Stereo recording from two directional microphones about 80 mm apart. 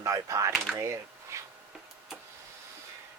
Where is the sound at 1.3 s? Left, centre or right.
Right.